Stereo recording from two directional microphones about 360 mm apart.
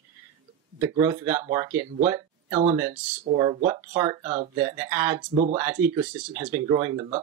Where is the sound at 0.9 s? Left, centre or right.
Centre.